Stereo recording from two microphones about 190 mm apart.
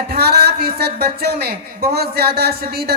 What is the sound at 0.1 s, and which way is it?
A woman's voice, 60° right (ahead or behind).